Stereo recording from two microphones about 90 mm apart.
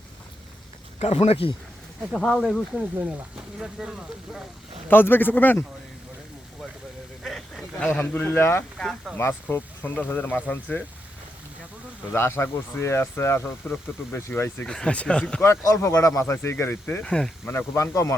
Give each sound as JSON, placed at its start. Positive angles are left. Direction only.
{"t": 1.1, "sound": "speech", "side_deg": 90}
{"t": 2.1, "sound": "speech", "side_deg": 5}
{"t": 4.9, "sound": "speech", "side_deg": 25}
{"t": 7.2, "sound": "a sound", "side_deg": 5}
{"t": 7.8, "sound": "speech", "side_deg": 15}
{"t": 8.8, "sound": "speech", "side_deg": 5}
{"t": 9.1, "sound": "speech", "side_deg": 25}
{"t": 12.1, "sound": "speech", "side_deg": 25}
{"t": 14.7, "sound": "speech", "side_deg": 10}
{"t": 15.4, "sound": "speech", "side_deg": 35}
{"t": 17.0, "sound": "speech", "side_deg": 10}
{"t": 17.7, "sound": "speech", "side_deg": 35}